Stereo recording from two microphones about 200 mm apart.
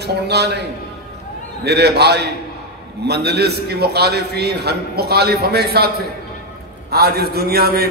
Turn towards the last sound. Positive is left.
turn(degrees=-50)  # may be behind; listen again after turning